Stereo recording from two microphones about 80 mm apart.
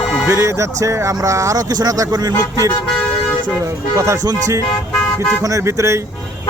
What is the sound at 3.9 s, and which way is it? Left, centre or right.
Speech, right.